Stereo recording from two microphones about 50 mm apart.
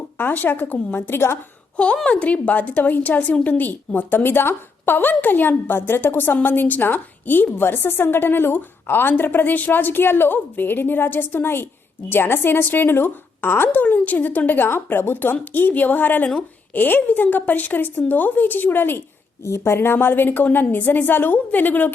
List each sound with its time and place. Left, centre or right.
0.2 s a woman's voice: left
0.9 s a woman's voice: left
1.7 s a woman's voice: left
19.5 s a woman's voice: left